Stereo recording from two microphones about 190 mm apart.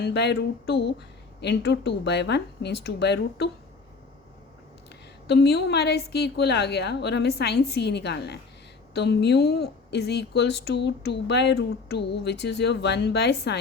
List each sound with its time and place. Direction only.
0.0 s speech: 60° left (ahead or behind)
5.3 s speech: 60° left (ahead or behind)